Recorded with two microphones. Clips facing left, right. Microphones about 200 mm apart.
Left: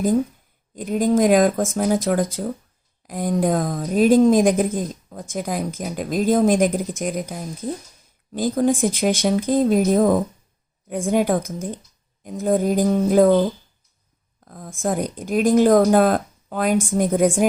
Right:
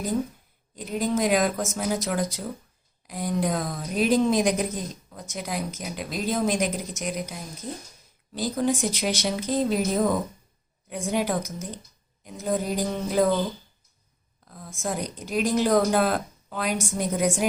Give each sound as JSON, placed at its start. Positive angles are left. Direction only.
{"t": 0.8, "sound": "a woman's voice", "side_deg": 50}